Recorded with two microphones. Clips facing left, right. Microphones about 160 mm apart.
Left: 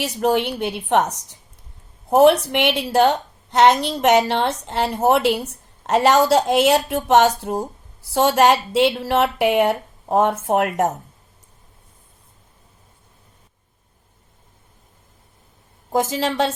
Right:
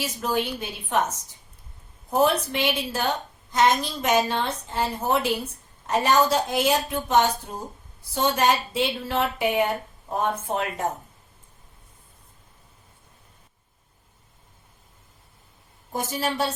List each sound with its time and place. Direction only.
0.0 s speech: 70° left (ahead or behind)
15.9 s a woman's voice: 90° left